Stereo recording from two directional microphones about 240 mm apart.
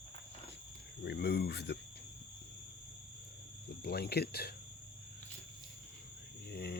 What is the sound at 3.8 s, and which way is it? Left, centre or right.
Speech, left.